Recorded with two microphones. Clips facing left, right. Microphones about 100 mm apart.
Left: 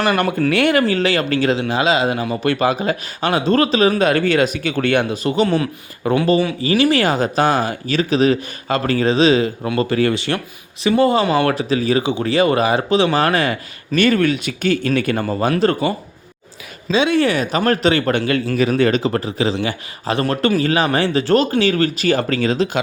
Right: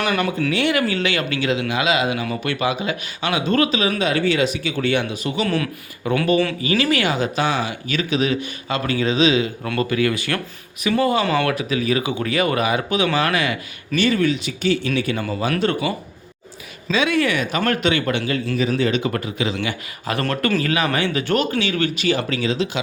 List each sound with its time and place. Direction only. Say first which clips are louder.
0.0 s speech: left 4 dB; 50° left (ahead or behind)
5.1 s speech: left 6 dB; 40° left (ahead or behind)
5.5 s a man's voice: left 3 dB; 25° left (ahead or behind)
7.0 s a man's voice: left 4 dB; 40° left (ahead or behind)
13.9 s speech: left 3 dB; 55° left (ahead or behind); by 15.9 s 40° left (ahead or behind)
16.9 s speech: left 4 dB; 30° left (ahead or behind)
18.5 s speech: left 4 dB; 60° left (ahead or behind)
19.0 s a man's voice: left 4 dB; 35° left (ahead or behind)